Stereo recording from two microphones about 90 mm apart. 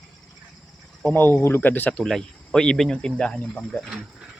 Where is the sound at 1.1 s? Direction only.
20° left (ahead or behind).